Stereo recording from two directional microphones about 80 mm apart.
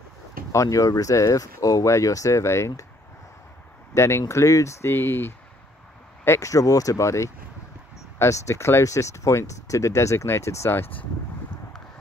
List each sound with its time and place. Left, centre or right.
0.5 s speech: left
3.9 s speech: left